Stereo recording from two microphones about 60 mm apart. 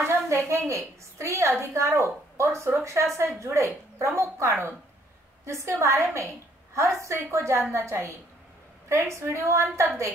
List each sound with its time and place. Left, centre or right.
0.0 s a woman's voice: right